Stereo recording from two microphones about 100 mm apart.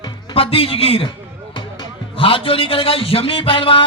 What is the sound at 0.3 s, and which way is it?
Speech, 70° left (ahead or behind).